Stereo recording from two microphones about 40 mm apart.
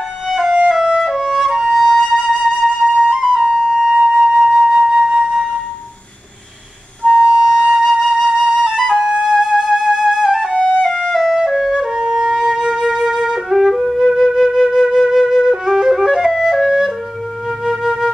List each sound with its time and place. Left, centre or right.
0.7 s music: centre
1.0 s flute: centre
7.1 s flute: centre
9.0 s flute: centre
9.3 s music: centre
11.0 s flute: centre
12.0 s music: centre
12.4 s flute: centre